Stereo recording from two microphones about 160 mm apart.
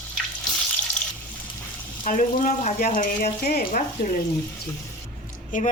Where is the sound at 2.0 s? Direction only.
55° left (ahead or behind).